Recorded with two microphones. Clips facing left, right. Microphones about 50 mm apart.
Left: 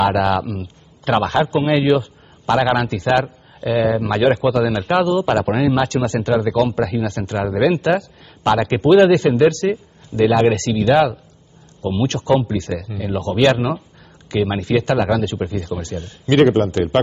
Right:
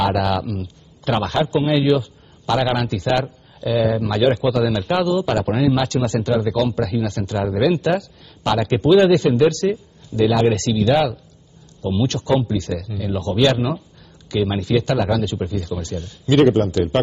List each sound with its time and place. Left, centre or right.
0.0 s a man's voice: left